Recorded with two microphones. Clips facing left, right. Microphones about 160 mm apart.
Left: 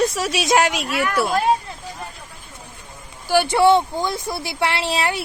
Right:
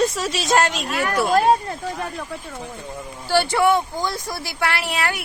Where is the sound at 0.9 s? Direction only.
40° right (ahead or behind).